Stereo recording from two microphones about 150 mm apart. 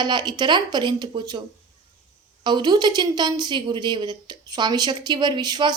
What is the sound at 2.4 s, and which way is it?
A woman's voice, 30° right (ahead or behind).